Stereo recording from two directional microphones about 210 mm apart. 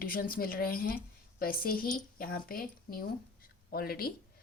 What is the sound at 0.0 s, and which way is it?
A woman's voice, 45° left (ahead or behind).